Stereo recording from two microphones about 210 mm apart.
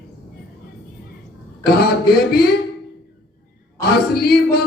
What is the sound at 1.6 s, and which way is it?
Speech, 50° left (ahead or behind).